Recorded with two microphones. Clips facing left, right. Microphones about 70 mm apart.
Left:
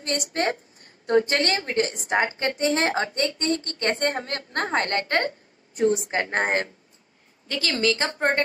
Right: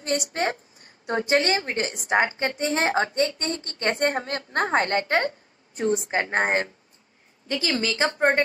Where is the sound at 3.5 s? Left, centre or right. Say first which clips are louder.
Left 4 dB; left.